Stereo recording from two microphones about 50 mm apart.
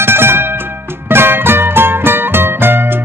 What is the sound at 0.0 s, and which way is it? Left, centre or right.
Music, right.